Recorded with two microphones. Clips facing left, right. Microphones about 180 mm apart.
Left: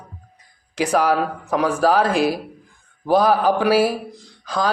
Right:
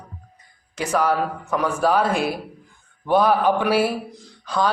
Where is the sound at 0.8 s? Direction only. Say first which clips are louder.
Left 3 dB; 75° left (ahead or behind).